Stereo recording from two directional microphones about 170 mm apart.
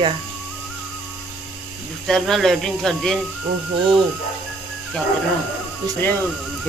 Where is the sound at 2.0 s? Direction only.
Centre (ahead or behind).